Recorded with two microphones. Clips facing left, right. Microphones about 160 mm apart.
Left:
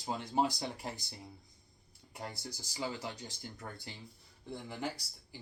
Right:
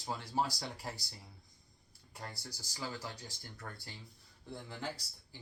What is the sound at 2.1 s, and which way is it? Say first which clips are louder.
Speech: left 4 dB; 20° left (ahead or behind).